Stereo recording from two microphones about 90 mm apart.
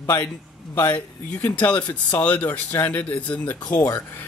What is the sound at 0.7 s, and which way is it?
Speech, 20° left (ahead or behind).